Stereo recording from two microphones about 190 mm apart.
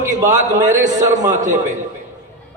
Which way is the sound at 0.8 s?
15° right (ahead or behind).